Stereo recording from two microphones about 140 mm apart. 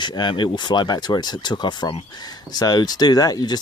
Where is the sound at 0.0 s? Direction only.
30° left (ahead or behind).